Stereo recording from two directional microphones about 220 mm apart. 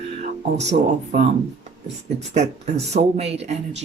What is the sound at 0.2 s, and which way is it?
Speech, 30° right (ahead or behind).